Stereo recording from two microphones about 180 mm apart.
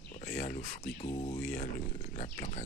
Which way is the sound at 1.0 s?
35° left (ahead or behind).